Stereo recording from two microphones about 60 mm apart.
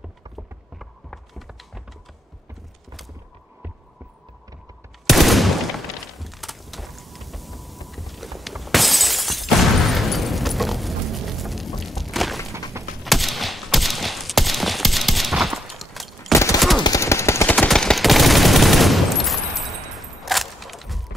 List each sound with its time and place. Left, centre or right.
5.0 s a sound: centre
16.3 s fusillade: left
16.5 s machine gun: centre
17.0 s a sound: left
17.6 s machine gun: centre
17.9 s fusillade: centre